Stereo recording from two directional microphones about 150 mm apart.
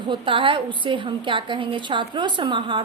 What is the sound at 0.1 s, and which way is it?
A woman's voice, 35° right (ahead or behind).